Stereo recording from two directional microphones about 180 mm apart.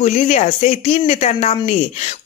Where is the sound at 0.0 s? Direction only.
40° left (ahead or behind).